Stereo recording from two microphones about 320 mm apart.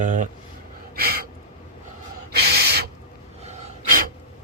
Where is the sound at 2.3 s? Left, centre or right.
Right.